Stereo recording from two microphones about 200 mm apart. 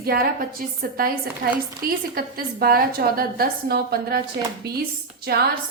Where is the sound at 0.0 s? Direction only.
50° right (ahead or behind).